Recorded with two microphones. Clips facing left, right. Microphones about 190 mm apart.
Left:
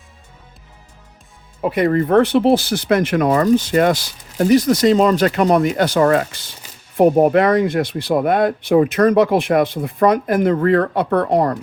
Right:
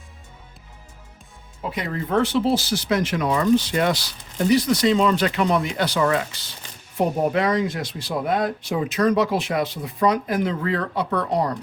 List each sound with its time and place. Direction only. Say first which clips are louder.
1.6 s speech: left 12 dB; 55° left (ahead or behind)